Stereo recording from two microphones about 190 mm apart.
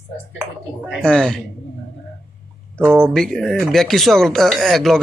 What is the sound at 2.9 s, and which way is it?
Speech, 5° left (ahead or behind).